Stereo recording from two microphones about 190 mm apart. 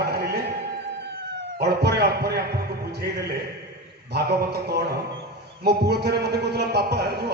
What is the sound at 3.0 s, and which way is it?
A man's voice, 60° right (ahead or behind).